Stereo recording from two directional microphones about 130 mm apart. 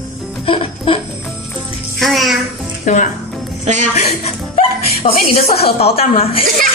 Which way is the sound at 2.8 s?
75° left (ahead or behind).